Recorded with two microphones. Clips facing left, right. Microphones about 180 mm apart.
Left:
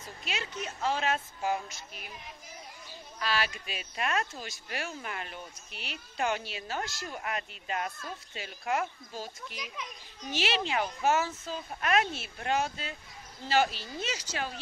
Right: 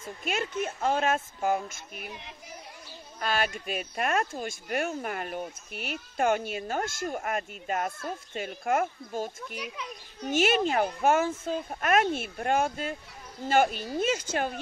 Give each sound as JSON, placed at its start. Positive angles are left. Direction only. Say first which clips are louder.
{"t": 0.2, "sound": "speech", "louder": "right 7 dB", "side_deg": -50}
{"t": 3.2, "sound": "speech", "louder": "right 3 dB", "side_deg": -50}